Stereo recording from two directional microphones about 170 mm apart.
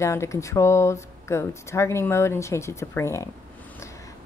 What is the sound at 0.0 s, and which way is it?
A woman's voice, 15° left (ahead or behind).